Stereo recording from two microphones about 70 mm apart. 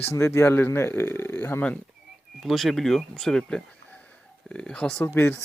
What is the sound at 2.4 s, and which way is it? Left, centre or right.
Speech, centre.